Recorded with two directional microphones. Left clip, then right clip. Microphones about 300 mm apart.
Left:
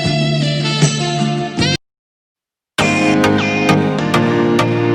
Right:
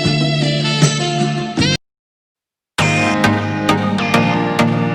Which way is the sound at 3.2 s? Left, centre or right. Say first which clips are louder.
Left 2 dB; left.